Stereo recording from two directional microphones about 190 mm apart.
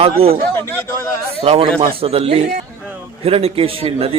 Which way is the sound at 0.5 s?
10° left (ahead or behind).